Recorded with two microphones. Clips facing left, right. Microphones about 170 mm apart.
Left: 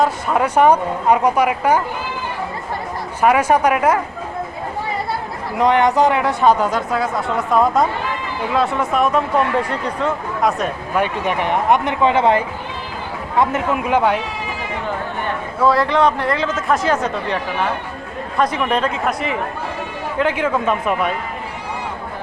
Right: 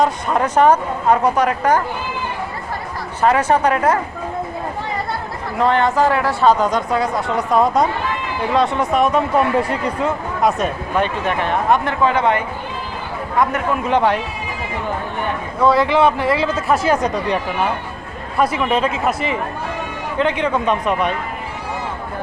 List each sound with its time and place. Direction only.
0.0 s speech: 5° left (ahead or behind)
3.2 s speech: 10° left (ahead or behind)
5.5 s speech: 15° left (ahead or behind); by 11.0 s centre (ahead or behind)
11.0 s speech: 15° left (ahead or behind)
13.7 s speech: 10° left (ahead or behind)
15.6 s speech: centre (ahead or behind)